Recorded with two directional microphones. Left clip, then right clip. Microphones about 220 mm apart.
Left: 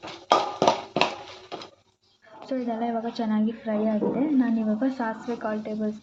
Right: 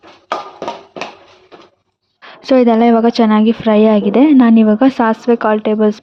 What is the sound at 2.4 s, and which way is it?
A woman's voice, 50° right (ahead or behind).